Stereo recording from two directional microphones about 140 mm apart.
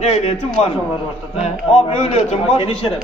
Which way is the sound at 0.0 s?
50° left (ahead or behind).